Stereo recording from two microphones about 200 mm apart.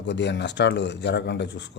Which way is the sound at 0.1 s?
60° left (ahead or behind).